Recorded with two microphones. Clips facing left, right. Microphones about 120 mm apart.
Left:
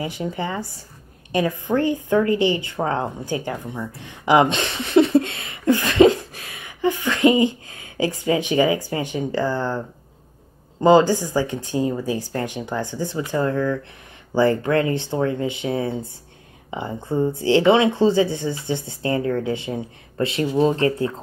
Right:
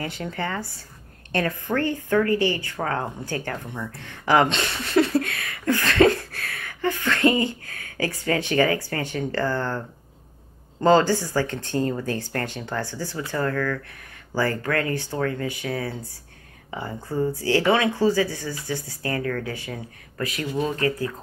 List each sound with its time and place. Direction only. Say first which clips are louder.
0.0 s speech: left 3 dB; 15° left (ahead or behind)